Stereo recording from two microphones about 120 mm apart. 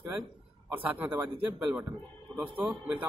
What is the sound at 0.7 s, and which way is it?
Speech, 15° right (ahead or behind).